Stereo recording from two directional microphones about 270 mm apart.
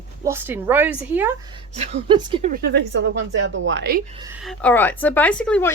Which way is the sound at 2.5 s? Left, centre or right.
Right.